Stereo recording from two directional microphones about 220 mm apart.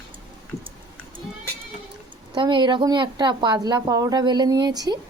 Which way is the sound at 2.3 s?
20° right (ahead or behind).